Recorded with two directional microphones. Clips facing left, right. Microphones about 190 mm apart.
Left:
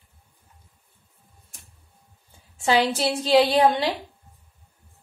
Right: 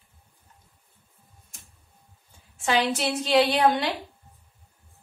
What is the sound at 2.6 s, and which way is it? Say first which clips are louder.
A woman's voice: left 3 dB; 35° left (ahead or behind).